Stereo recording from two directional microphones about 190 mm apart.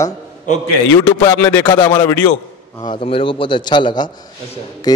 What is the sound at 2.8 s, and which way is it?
A man's voice, 25° left (ahead or behind).